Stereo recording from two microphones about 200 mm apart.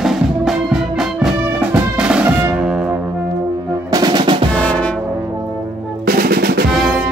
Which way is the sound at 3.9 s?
20° right (ahead or behind).